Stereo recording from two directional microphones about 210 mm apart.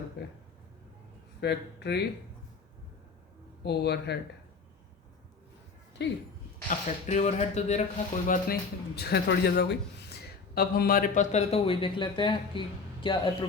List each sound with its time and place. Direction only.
1.4 s speech: 50° left (ahead or behind)
3.6 s speech: 50° left (ahead or behind)
6.0 s speech: 55° left (ahead or behind)
6.7 s speech: 35° left (ahead or behind)
9.0 s speech: 50° left (ahead or behind); by 13.3 s 25° left (ahead or behind)